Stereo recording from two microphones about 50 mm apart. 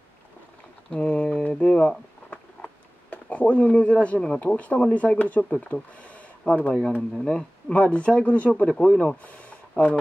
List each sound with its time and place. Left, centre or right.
0.8 s a sound: left
1.5 s speech: centre
7.7 s speech: left
8.8 s speech: left